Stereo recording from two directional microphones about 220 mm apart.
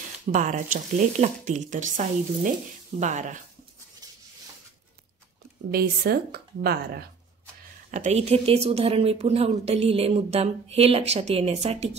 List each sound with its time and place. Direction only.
0.3 s speech: 35° right (ahead or behind)
5.7 s speech: 45° right (ahead or behind)
7.9 s a woman's voice: 30° right (ahead or behind)